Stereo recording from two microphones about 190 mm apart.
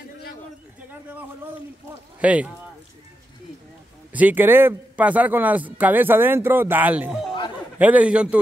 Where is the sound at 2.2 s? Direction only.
5° right (ahead or behind).